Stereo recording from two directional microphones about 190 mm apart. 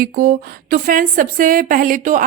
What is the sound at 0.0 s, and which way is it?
A woman's voice, 50° right (ahead or behind).